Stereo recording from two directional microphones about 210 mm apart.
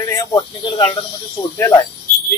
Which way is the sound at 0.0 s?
15° left (ahead or behind).